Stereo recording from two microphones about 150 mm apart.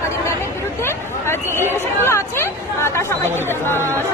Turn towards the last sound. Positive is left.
turn(degrees=15)  # may be behind; listen again after turning